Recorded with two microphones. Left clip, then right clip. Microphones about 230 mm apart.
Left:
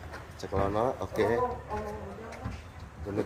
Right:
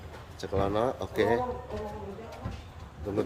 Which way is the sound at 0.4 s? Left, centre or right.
Centre.